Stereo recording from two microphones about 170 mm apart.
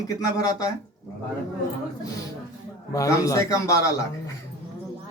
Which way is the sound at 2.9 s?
20° left (ahead or behind).